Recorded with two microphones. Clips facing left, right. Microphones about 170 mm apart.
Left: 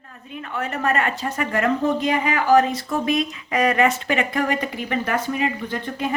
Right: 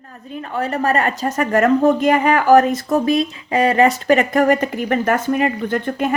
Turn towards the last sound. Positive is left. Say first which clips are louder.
# right 6 dB
turn(degrees=-50)  # may be behind; listen again after turning